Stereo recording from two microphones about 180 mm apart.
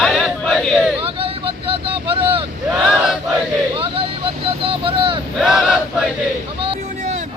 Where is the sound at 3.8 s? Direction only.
30° right (ahead or behind).